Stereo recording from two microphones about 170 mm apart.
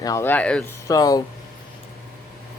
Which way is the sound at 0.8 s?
20° left (ahead or behind).